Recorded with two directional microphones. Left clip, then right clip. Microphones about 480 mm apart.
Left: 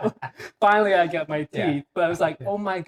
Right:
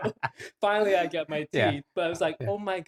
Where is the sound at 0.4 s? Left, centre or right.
Left.